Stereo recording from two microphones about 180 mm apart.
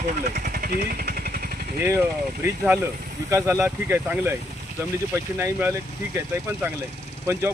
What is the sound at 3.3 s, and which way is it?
Speech, 15° right (ahead or behind).